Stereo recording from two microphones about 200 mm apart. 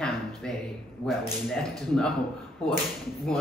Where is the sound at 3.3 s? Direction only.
5° left (ahead or behind).